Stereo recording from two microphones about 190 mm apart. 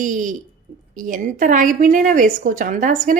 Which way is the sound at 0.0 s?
45° right (ahead or behind).